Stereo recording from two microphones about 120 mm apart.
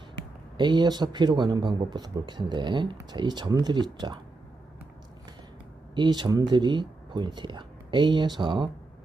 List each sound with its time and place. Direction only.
0.5 s speech: 40° right (ahead or behind)
5.9 s speech: 40° right (ahead or behind)